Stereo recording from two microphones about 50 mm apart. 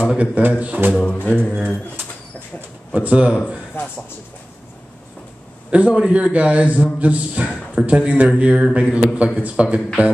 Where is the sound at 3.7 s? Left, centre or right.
Left.